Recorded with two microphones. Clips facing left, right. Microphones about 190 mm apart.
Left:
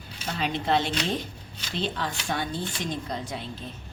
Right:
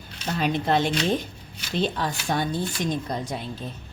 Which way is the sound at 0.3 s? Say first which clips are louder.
Right 3 dB; 45° right (ahead or behind).